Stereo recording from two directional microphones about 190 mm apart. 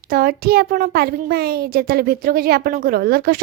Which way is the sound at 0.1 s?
50° right (ahead or behind).